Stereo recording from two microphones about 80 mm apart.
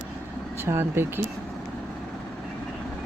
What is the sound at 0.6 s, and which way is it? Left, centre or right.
Speech, right.